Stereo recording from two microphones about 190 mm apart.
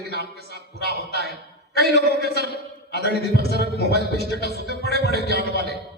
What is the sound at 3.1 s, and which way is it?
Speech, 55° right (ahead or behind).